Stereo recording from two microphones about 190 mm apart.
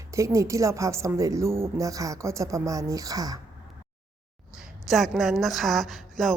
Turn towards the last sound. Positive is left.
turn(degrees=0)  # may be behind; listen again after turning